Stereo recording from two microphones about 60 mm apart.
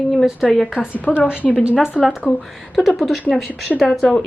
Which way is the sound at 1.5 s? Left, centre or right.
Centre.